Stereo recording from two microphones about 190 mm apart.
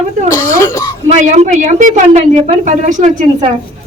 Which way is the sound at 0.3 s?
15° left (ahead or behind).